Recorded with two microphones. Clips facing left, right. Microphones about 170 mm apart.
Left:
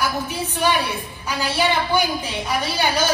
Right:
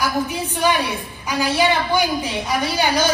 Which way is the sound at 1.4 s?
10° right (ahead or behind).